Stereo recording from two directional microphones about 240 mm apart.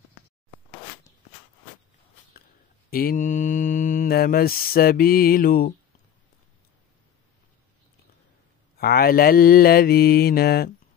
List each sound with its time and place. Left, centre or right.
2.9 s mantra: left
8.7 s mantra: left